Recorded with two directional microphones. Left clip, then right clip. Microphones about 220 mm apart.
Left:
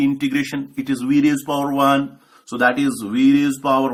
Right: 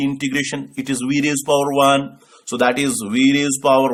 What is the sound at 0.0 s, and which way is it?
Speech, 40° right (ahead or behind).